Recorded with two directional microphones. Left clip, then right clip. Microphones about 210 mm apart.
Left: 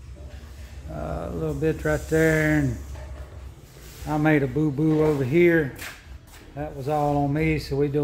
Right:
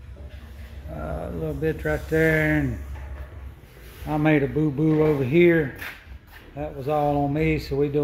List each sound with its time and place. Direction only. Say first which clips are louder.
1.0 s speech: left 1 dB; 15° left (ahead or behind)
4.0 s speech: even; 5° right (ahead or behind)